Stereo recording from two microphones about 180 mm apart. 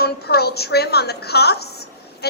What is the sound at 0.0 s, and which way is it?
A woman's voice, 60° left (ahead or behind).